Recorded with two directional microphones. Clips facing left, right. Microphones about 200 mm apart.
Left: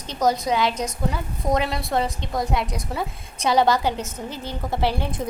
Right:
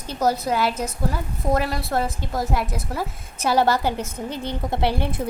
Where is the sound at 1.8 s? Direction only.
Centre (ahead or behind).